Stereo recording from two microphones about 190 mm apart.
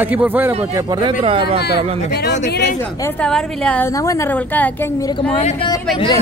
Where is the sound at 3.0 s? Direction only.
5° left (ahead or behind).